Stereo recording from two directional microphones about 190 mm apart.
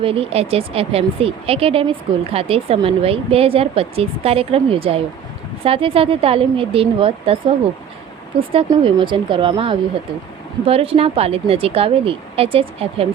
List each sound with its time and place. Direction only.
0.0 s a woman's voice: 30° right (ahead or behind)